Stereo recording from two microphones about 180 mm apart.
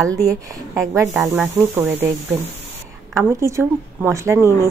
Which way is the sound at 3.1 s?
15° right (ahead or behind).